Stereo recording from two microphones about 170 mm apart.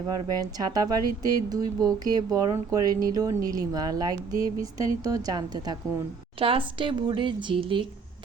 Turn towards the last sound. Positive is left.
turn(degrees=-30)  # may be behind; listen again after turning